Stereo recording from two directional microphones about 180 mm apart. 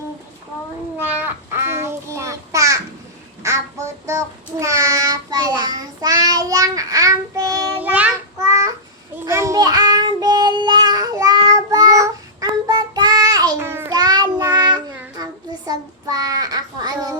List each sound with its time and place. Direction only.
1.0 s child singing: 10° right (ahead or behind)
4.1 s child singing: 15° right (ahead or behind)